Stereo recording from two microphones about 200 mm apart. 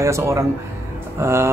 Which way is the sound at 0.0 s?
15° right (ahead or behind).